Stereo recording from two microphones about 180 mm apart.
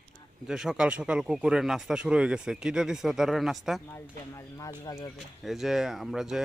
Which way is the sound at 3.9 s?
15° left (ahead or behind).